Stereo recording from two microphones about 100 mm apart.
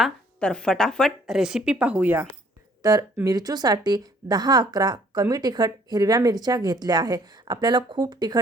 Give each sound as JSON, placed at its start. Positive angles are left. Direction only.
{"t": 0.3, "sound": "a woman's voice", "side_deg": 10}
{"t": 1.3, "sound": "speech", "side_deg": -5}
{"t": 2.8, "sound": "speech", "side_deg": -40}